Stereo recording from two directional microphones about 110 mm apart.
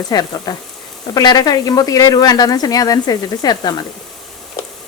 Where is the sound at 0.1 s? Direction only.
40° left (ahead or behind).